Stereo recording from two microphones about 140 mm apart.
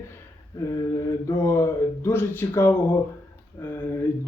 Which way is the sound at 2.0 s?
15° left (ahead or behind).